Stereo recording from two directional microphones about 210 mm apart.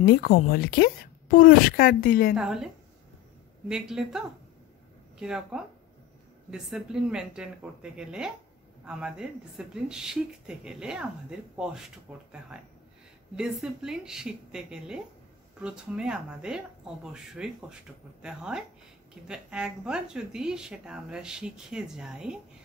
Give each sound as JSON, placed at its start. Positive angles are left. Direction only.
{"t": 0.0, "sound": "speech", "side_deg": 45}
{"t": 2.3, "sound": "speech", "side_deg": 0}
{"t": 5.2, "sound": "speech", "side_deg": -5}